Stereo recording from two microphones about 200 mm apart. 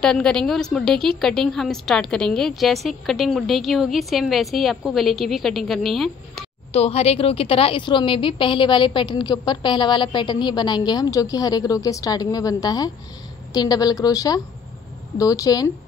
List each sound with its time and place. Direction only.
0.0 s a woman's voice: 5° left (ahead or behind)
6.7 s a woman's voice: 30° left (ahead or behind)